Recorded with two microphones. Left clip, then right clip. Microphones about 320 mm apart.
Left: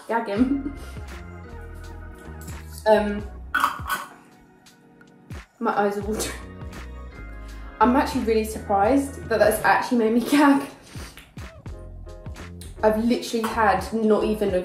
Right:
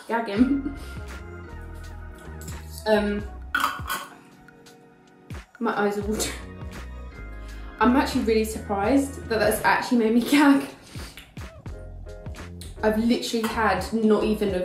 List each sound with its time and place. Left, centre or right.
0.1 s a woman's voice: centre
2.8 s music: centre
5.3 s music: centre
5.9 s speech: centre
7.7 s a woman's voice: centre
12.2 s music: centre
13.3 s a woman's voice: centre